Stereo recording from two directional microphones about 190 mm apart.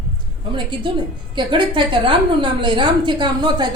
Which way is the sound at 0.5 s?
25° right (ahead or behind).